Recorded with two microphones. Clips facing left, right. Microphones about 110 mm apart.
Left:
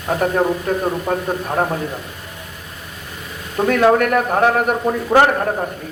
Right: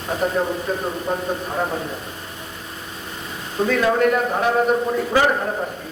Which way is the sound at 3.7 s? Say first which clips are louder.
Left 4 dB; 70° left (ahead or behind).